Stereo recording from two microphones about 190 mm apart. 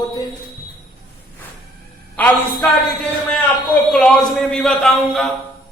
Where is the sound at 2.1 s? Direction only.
10° left (ahead or behind).